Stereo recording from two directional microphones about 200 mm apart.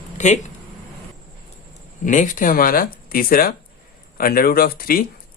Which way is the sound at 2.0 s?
40° left (ahead or behind).